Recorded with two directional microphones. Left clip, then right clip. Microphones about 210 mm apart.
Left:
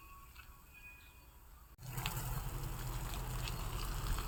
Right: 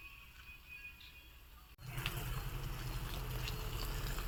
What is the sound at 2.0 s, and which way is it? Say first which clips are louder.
Vehicle: even; 50° left (ahead or behind).